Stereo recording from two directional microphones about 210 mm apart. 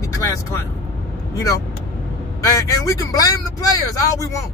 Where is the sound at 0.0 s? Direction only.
15° left (ahead or behind).